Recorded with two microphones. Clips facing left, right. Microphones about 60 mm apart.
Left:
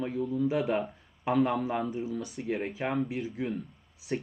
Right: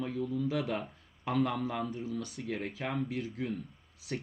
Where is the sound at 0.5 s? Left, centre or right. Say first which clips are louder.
Left 6 dB; centre.